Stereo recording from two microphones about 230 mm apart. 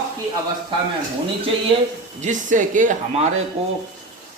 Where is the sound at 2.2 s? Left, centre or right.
Right.